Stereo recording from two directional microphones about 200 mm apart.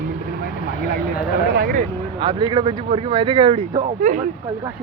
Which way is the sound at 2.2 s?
25° right (ahead or behind).